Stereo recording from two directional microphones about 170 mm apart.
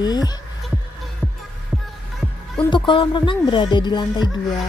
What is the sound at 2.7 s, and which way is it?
Speech, 30° left (ahead or behind).